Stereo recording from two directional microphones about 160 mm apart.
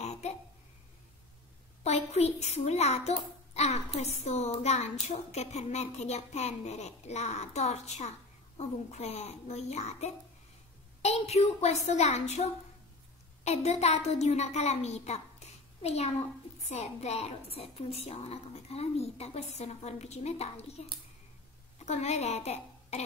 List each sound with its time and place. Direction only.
0.0 s babbling: 45° left (ahead or behind)
1.8 s a child's voice: 40° left (ahead or behind)
21.7 s a woman's voice: 45° left (ahead or behind)